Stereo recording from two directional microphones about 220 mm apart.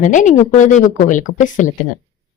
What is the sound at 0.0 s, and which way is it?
A woman's voice, 35° left (ahead or behind).